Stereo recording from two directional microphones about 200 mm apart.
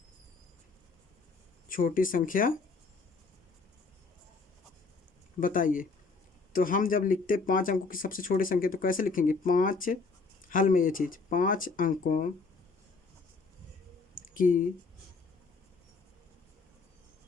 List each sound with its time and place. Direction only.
1.6 s speech: 45° left (ahead or behind)
5.4 s speech: 40° left (ahead or behind)
14.3 s speech: 45° left (ahead or behind)